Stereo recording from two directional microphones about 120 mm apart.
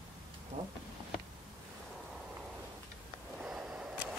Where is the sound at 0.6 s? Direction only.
40° right (ahead or behind).